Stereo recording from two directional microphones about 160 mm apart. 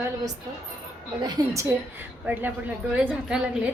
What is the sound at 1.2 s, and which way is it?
A woman's voice, 25° right (ahead or behind).